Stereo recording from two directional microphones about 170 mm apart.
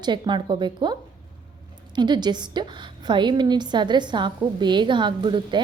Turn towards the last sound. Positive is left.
turn(degrees=-30)  # may be behind; listen again after turning